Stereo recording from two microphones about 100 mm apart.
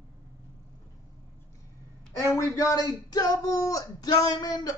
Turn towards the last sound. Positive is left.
turn(degrees=40)  # may be behind; listen again after turning